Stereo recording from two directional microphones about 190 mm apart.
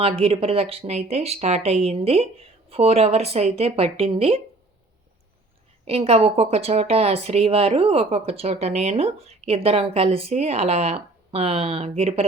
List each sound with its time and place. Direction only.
0.0 s speech: 30° right (ahead or behind)
5.8 s speech: 30° right (ahead or behind)